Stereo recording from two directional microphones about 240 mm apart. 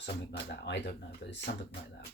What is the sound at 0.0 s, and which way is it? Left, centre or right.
Speech, left.